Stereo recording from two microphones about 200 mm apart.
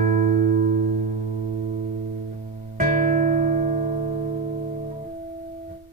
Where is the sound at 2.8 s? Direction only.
40° right (ahead or behind).